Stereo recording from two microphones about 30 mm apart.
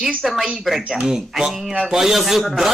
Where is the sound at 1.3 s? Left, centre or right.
Centre.